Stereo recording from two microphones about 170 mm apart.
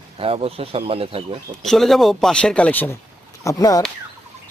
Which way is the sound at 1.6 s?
Centre (ahead or behind).